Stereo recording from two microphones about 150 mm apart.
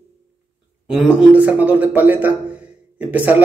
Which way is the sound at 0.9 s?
5° right (ahead or behind).